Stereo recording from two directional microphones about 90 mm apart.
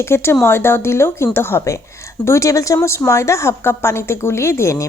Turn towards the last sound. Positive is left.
turn(degrees=30)  # may be behind; listen again after turning